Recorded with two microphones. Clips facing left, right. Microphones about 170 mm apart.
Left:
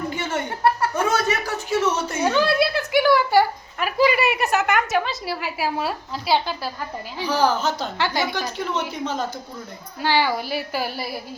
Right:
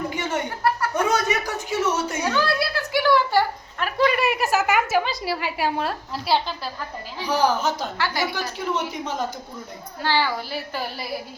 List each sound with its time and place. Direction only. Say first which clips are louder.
0.1 s chuckle: even; 15° right (ahead or behind)
0.6 s chuckle: left 3 dB; 25° left (ahead or behind)
1.1 s a sound: even; 15° right (ahead or behind)
2.2 s a sound: left 7 dB; 20° left (ahead or behind); by 6.4 s centre (ahead or behind)
7.3 s a woman's voice: even; 15° right (ahead or behind)
7.9 s a woman's voice: left 2 dB; 20° left (ahead or behind)
8.3 s a woman's voice: left 1 dB; 10° right (ahead or behind)
10.0 s a woman's voice: left 2 dB; 15° left (ahead or behind)